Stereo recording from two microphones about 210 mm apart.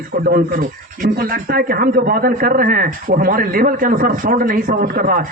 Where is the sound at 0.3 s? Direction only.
45° right (ahead or behind).